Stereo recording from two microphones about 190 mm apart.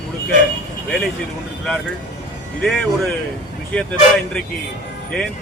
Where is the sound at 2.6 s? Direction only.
Centre (ahead or behind).